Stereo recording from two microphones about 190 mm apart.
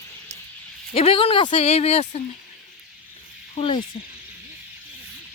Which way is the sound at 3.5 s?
30° left (ahead or behind).